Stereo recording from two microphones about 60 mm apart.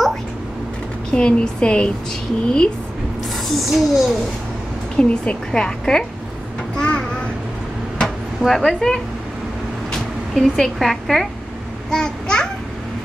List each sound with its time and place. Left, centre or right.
1.1 s a woman's voice: centre
3.4 s a child's voice: centre
4.9 s a woman's voice: centre
6.8 s vehicle: centre
8.4 s a child's voice: centre